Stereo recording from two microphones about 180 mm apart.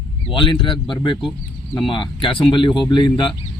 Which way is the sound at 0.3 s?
25° left (ahead or behind).